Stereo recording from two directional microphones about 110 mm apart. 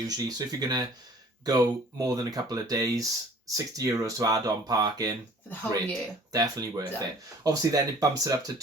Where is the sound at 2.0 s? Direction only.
35° right (ahead or behind).